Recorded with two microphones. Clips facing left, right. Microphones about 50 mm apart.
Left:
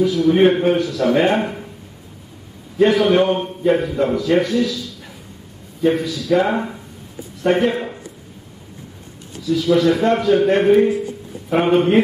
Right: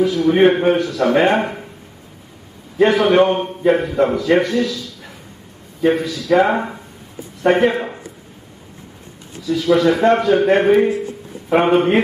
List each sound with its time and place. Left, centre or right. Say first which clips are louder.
0.0 s a man's voice: right 1 dB; centre
2.9 s a man's voice: right 2 dB; centre
9.5 s a man's voice: right 1 dB; centre